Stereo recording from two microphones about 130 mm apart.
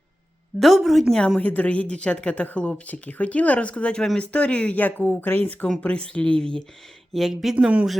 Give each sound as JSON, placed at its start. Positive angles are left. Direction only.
{"t": 0.6, "sound": "a woman's voice", "side_deg": 0}